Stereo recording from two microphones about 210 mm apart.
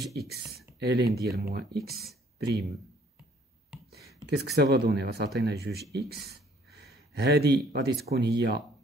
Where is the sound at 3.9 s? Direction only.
50° right (ahead or behind).